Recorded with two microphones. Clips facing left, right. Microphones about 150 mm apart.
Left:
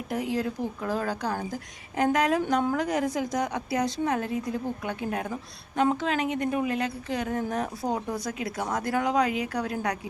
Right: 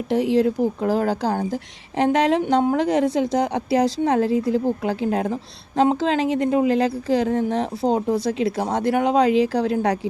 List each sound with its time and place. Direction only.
0.1 s a woman's voice: 30° right (ahead or behind)